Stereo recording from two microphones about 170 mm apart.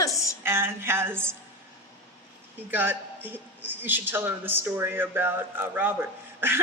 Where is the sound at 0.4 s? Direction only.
15° right (ahead or behind).